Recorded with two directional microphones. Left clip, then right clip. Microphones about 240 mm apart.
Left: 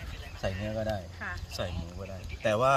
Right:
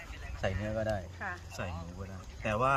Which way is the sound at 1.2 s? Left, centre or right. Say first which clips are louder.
Left 1 dB; right.